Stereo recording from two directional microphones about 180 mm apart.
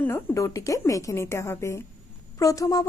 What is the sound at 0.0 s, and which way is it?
A woman's voice, 15° left (ahead or behind).